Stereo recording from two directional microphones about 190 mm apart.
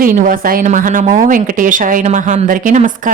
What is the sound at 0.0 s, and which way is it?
A woman's voice, 45° right (ahead or behind).